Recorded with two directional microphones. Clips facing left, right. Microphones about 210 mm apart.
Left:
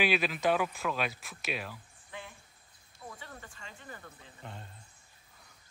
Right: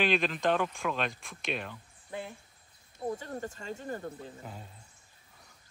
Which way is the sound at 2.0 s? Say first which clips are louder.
Right 7 dB; 35° right (ahead or behind).